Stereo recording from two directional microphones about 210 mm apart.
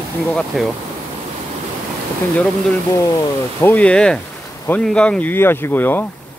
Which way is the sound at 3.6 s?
10° left (ahead or behind).